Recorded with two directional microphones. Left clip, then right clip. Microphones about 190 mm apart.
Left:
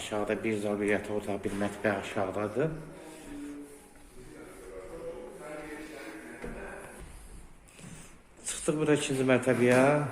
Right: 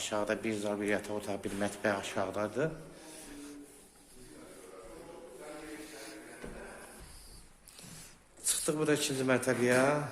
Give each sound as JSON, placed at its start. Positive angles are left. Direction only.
{"t": 0.0, "sound": "speech", "side_deg": -20}
{"t": 8.7, "sound": "speech", "side_deg": -15}
{"t": 9.3, "sound": "speech", "side_deg": 0}